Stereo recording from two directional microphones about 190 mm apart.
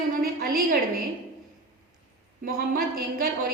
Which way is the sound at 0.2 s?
50° right (ahead or behind).